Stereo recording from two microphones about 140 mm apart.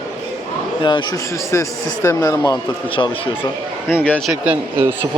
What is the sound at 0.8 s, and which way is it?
A man's voice, 35° left (ahead or behind).